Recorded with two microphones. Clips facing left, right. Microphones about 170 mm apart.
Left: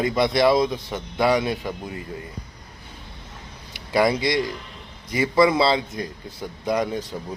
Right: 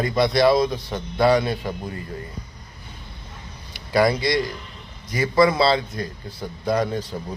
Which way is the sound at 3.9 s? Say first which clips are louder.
Right 1 dB; 20° left (ahead or behind).